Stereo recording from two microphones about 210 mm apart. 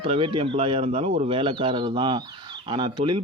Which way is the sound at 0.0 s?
25° right (ahead or behind).